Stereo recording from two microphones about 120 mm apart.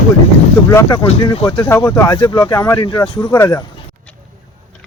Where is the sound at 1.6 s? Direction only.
20° left (ahead or behind).